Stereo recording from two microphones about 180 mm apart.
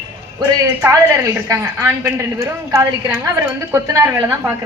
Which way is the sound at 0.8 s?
15° right (ahead or behind).